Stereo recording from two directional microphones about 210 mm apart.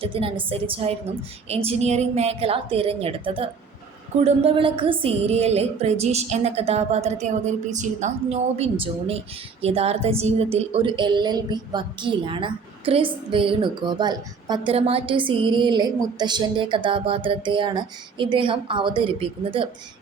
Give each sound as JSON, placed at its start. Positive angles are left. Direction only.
{"t": 0.0, "sound": "a woman's voice", "side_deg": -25}